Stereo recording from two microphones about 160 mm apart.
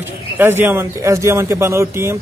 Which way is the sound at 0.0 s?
15° right (ahead or behind).